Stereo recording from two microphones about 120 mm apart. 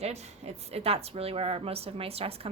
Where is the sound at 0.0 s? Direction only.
65° right (ahead or behind).